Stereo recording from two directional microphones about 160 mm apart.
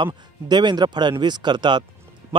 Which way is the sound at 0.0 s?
30° right (ahead or behind).